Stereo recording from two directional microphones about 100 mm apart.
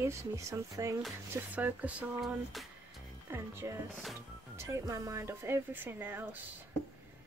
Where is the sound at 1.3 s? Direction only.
20° right (ahead or behind).